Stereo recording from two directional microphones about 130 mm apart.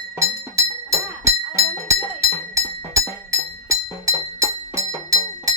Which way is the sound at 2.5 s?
25° right (ahead or behind).